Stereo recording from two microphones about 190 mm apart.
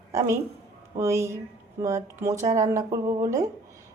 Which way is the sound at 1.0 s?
15° right (ahead or behind).